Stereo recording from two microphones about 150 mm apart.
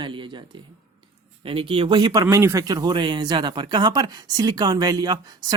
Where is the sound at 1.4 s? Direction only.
35° right (ahead or behind).